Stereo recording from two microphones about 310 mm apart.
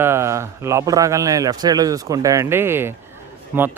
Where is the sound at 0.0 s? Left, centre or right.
Centre.